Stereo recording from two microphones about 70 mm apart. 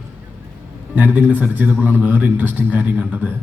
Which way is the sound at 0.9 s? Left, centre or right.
Right.